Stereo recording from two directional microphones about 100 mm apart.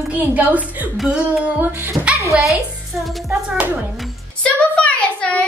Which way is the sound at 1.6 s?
20° right (ahead or behind).